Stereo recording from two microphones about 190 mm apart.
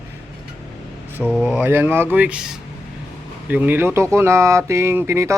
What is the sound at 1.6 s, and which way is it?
Speech, 10° right (ahead or behind).